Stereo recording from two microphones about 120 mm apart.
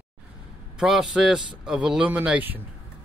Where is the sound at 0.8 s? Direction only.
Centre (ahead or behind).